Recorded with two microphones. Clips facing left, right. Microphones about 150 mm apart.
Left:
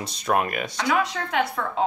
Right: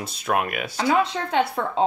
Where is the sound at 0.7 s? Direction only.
30° right (ahead or behind).